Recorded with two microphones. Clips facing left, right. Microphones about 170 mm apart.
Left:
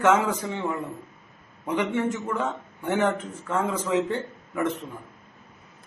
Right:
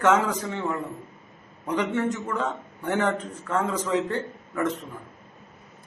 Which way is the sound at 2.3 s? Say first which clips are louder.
Even; 10° left (ahead or behind).